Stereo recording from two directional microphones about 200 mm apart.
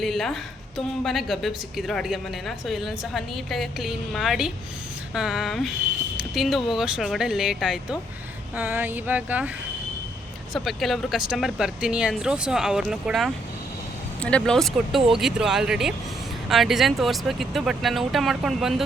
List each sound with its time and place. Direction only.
0.0 s speech: centre (ahead or behind)